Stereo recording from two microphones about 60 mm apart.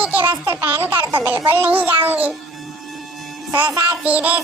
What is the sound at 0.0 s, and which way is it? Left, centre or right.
A child's voice, right.